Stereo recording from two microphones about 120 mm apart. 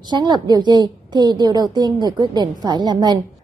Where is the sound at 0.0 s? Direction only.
35° right (ahead or behind).